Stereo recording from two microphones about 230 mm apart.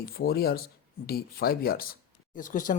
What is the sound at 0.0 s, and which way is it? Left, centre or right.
Speech, left.